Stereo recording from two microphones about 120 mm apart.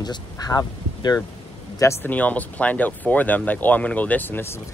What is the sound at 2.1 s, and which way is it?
Speech, 15° left (ahead or behind).